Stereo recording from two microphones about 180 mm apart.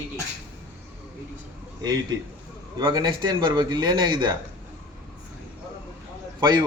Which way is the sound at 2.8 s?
25° right (ahead or behind).